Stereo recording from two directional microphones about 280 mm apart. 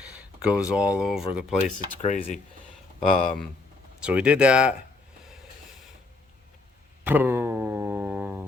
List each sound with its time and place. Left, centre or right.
0.0 s speech: centre
1.6 s speech: left
3.2 s speech: centre
7.0 s a sound: centre